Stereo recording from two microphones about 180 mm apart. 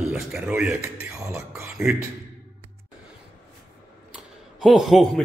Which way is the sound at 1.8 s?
15° right (ahead or behind).